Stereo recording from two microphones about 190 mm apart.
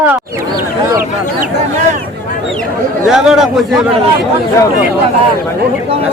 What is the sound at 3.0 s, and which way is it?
Speech, centre (ahead or behind).